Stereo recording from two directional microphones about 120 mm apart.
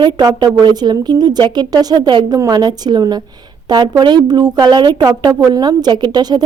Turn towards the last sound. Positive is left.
turn(degrees=-35)  # may be behind; listen again after turning